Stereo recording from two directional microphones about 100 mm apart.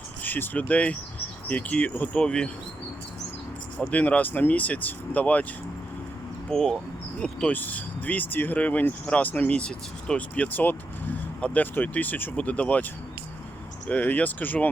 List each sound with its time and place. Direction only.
0.2 s speech: 20° left (ahead or behind)
3.8 s speech: 15° left (ahead or behind)
6.5 s speech: 5° left (ahead or behind)